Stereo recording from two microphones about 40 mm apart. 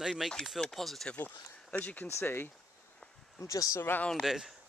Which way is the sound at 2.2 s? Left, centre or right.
Left.